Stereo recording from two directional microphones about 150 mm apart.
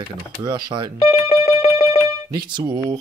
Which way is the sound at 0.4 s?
30° right (ahead or behind).